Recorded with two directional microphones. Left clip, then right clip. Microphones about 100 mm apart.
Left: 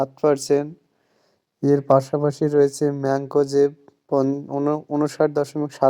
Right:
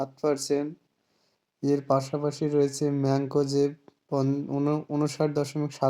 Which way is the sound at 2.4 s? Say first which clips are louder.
Left 7 dB; 30° right (ahead or behind).